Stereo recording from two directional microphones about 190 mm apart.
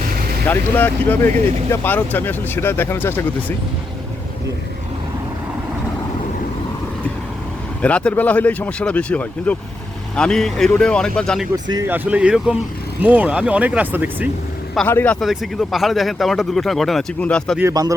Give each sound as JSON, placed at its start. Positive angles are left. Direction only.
{"t": 0.4, "sound": "speech", "side_deg": 10}
{"t": 7.8, "sound": "speech", "side_deg": 5}
{"t": 11.5, "sound": "speech", "side_deg": -20}
{"t": 11.9, "sound": "speech", "side_deg": -10}
{"t": 14.8, "sound": "speech", "side_deg": 10}
{"t": 17.6, "sound": "speech", "side_deg": -15}